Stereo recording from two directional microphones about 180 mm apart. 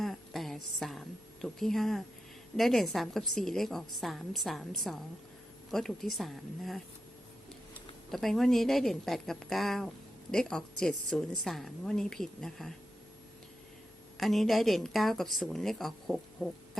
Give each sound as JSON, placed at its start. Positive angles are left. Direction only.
{"t": 0.0, "sound": "a sound", "side_deg": 0}
{"t": 2.6, "sound": "a woman's voice", "side_deg": 0}
{"t": 8.1, "sound": "a woman's voice", "side_deg": 0}
{"t": 14.2, "sound": "a woman's voice", "side_deg": 0}